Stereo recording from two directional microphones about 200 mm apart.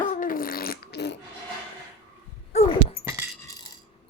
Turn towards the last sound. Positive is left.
turn(degrees=-15)  # may be behind; listen again after turning